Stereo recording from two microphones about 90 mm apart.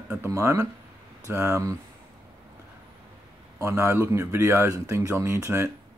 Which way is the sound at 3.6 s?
30° right (ahead or behind).